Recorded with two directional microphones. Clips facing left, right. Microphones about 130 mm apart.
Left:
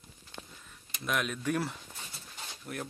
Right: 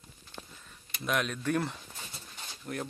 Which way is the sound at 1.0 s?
5° left (ahead or behind).